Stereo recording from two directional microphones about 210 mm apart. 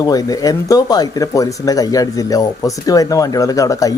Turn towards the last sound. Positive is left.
turn(degrees=15)  # may be behind; listen again after turning